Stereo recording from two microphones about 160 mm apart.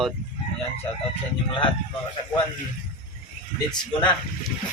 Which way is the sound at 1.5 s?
30° left (ahead or behind).